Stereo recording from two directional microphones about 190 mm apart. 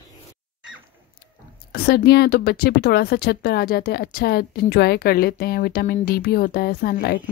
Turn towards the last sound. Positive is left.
turn(degrees=50)  # may be behind; listen again after turning